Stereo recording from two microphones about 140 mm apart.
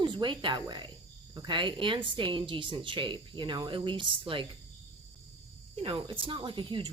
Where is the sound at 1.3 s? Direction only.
30° right (ahead or behind).